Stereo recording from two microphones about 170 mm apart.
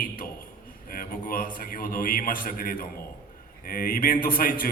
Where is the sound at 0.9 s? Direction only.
55° left (ahead or behind).